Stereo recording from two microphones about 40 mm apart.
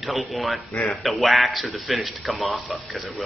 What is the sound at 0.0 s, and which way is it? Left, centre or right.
Speech, centre.